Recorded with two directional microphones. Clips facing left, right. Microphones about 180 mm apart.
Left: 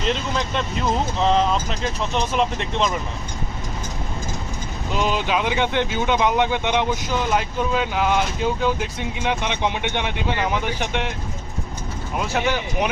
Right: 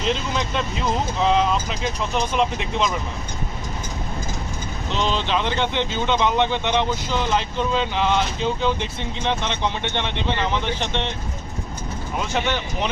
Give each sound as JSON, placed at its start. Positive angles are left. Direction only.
{"t": 0.0, "sound": "speech", "side_deg": 0}
{"t": 4.9, "sound": "speech", "side_deg": 10}
{"t": 12.1, "sound": "speech", "side_deg": 5}